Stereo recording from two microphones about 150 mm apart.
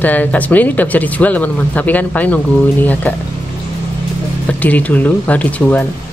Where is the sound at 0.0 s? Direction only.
10° left (ahead or behind).